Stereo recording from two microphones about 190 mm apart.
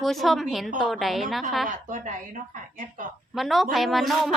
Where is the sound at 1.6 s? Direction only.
45° right (ahead or behind).